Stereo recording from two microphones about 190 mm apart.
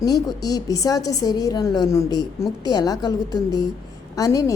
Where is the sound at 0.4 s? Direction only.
20° left (ahead or behind).